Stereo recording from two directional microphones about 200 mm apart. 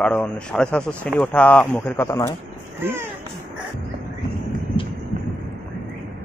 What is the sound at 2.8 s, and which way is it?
Speech, 10° right (ahead or behind).